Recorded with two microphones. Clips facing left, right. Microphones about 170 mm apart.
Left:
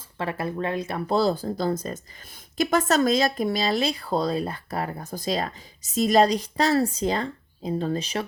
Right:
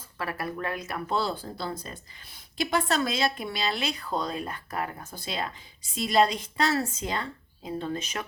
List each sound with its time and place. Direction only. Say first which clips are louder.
0.2 s speech: left 5 dB; 25° left (ahead or behind)